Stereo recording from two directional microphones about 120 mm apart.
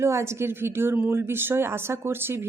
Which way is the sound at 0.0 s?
25° right (ahead or behind).